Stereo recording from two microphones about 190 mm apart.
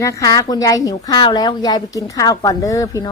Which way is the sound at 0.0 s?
15° left (ahead or behind).